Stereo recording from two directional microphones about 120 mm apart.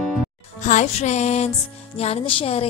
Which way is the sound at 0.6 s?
85° left.